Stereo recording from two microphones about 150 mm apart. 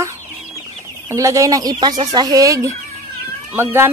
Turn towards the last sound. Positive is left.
turn(degrees=-15)  # may be behind; listen again after turning